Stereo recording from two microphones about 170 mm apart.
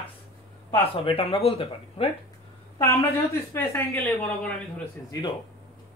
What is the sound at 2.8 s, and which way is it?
A woman's voice, 15° left (ahead or behind).